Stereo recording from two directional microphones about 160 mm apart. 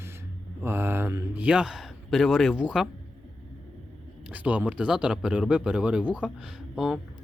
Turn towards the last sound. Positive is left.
turn(degrees=-5)  # may be behind; listen again after turning